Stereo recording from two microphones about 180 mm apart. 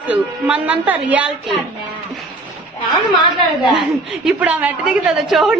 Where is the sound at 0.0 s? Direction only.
5° right (ahead or behind).